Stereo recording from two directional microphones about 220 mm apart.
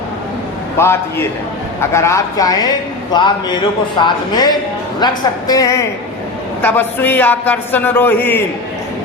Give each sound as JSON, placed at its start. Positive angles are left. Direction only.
{"t": 0.8, "sound": "a man's voice", "side_deg": 10}